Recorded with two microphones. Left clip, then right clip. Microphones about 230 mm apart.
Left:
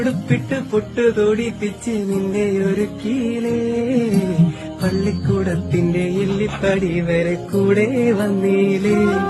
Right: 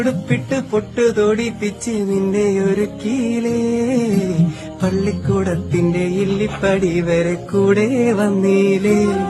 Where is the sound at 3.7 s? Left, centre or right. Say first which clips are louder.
Right 1 dB; centre.